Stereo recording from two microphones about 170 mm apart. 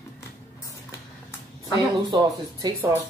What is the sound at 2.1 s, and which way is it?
Speech, 25° right (ahead or behind).